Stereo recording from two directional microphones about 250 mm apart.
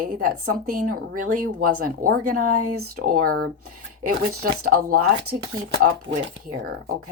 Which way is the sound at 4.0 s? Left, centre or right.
Right.